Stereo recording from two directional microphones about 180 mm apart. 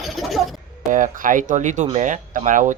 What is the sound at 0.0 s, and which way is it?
Music, centre (ahead or behind).